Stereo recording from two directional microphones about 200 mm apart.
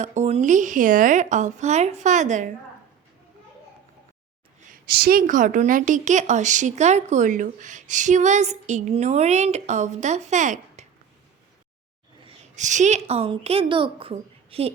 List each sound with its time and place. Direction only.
0.0 s a woman's voice: 35° right (ahead or behind)
4.7 s a woman's voice: 50° right (ahead or behind)
12.2 s a woman's voice: 35° right (ahead or behind)